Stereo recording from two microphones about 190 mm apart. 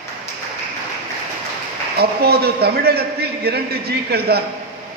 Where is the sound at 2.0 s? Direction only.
55° right (ahead or behind).